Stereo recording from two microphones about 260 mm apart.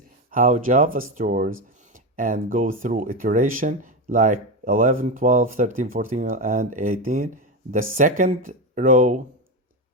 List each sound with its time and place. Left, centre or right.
0.3 s speech: right